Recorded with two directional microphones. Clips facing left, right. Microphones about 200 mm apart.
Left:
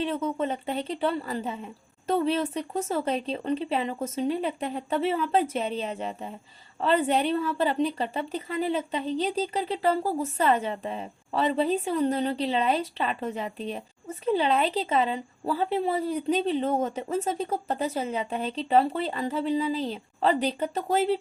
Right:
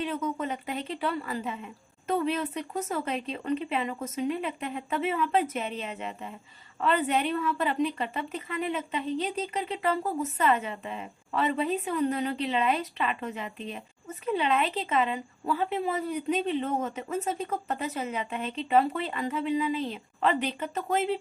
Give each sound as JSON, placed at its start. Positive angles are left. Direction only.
{"t": 0.0, "sound": "a woman's voice", "side_deg": 30}